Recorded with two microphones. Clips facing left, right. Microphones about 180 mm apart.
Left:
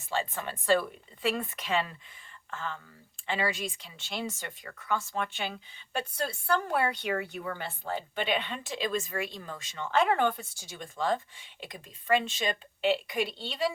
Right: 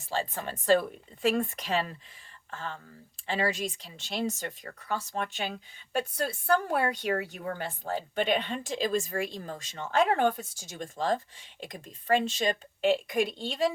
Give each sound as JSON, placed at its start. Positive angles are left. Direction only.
{"t": 0.1, "sound": "a woman's voice", "side_deg": -40}